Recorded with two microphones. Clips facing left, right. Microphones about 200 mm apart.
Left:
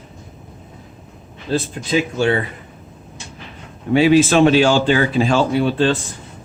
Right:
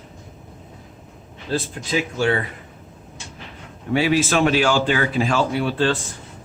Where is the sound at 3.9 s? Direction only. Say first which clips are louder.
Left 6 dB; 25° left (ahead or behind).